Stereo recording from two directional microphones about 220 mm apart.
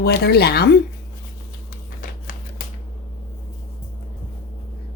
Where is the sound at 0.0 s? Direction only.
45° left (ahead or behind).